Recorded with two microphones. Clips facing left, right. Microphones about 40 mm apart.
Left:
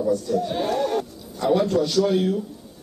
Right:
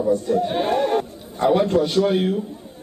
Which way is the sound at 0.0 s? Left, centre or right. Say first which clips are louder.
Right 3 dB; right.